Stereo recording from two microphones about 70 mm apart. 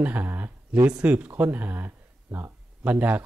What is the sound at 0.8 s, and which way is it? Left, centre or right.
Speech, centre.